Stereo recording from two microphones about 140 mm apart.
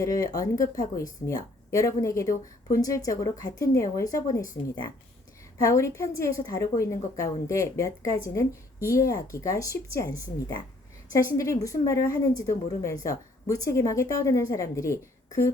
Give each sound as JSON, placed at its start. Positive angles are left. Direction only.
{"t": 0.0, "sound": "speech", "side_deg": 25}
{"t": 5.6, "sound": "speech", "side_deg": 20}
{"t": 11.1, "sound": "speech", "side_deg": 25}